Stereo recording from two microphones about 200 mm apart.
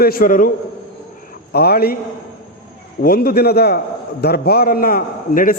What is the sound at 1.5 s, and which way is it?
Speech, 50° left (ahead or behind).